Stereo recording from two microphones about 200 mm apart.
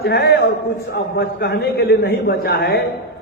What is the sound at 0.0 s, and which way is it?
A man's voice, 55° left (ahead or behind).